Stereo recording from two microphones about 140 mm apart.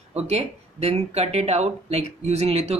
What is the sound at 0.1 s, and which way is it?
Speech, 50° right (ahead or behind).